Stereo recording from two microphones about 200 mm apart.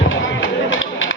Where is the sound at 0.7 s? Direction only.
70° left (ahead or behind).